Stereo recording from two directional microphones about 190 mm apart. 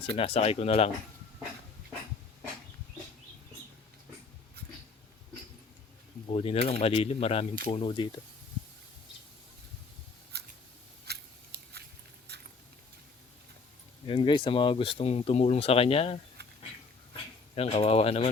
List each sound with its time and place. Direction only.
0.0 s speech: 30° left (ahead or behind)
6.2 s speech: 30° left (ahead or behind)
10.3 s scissors: 60° right (ahead or behind)
11.0 s biting: 60° right (ahead or behind)
12.3 s rodents: 60° right (ahead or behind)
14.1 s speech: 25° left (ahead or behind)
17.5 s speech: 30° left (ahead or behind)